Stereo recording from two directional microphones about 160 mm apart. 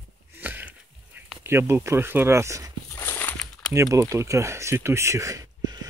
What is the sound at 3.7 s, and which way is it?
Speech, 20° right (ahead or behind).